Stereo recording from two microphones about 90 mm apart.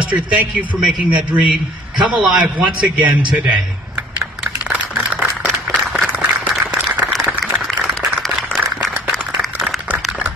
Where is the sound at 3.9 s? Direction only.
15° right (ahead or behind).